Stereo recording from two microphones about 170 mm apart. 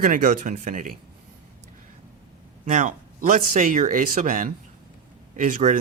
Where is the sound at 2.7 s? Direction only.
45° right (ahead or behind).